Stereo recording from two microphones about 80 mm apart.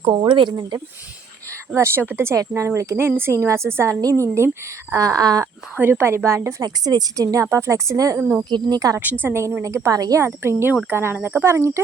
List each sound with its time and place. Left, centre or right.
0.0 s speech: right
1.7 s speech: right
4.9 s speech: right
5.7 s speech: right
6.6 s speech: right
7.2 s speech: right
8.2 s speech: right
8.4 s speech: right
9.2 s speech: right
9.6 s speech: right
11.4 s speech: right